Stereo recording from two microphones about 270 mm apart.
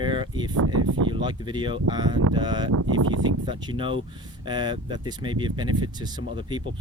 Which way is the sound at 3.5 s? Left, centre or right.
Centre.